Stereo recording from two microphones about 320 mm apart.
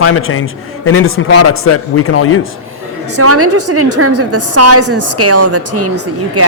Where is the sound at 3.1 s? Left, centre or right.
Right.